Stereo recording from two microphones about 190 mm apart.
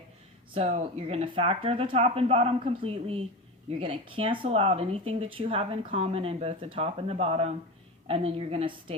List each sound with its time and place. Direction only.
0.5 s speech: 30° right (ahead or behind)